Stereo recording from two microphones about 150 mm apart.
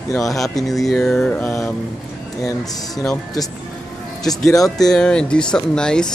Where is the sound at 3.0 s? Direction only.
20° left (ahead or behind).